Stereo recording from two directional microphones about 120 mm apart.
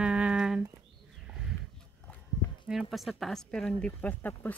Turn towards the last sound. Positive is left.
turn(degrees=15)  # may be behind; listen again after turning